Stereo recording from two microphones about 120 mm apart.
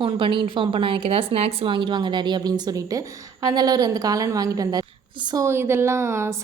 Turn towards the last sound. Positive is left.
turn(degrees=-25)  # may be behind; listen again after turning